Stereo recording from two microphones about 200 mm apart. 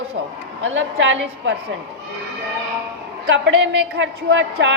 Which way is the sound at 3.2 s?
60° right (ahead or behind).